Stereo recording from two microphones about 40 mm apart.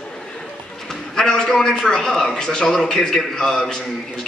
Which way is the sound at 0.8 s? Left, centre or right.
Centre.